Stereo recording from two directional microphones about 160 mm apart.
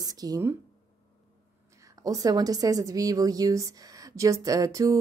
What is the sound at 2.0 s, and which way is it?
A woman's voice, 25° right (ahead or behind).